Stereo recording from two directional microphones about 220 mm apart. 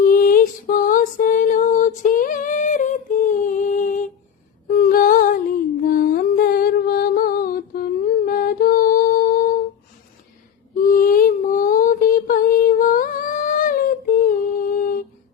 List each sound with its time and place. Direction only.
0.0 s music: 40° left (ahead or behind)
4.8 s female singing: 40° left (ahead or behind)
5.8 s music: 40° left (ahead or behind)
10.8 s a sound: 40° left (ahead or behind)
14.3 s humming: 40° left (ahead or behind)